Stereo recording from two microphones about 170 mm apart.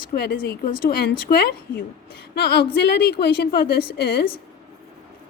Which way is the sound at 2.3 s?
80° left.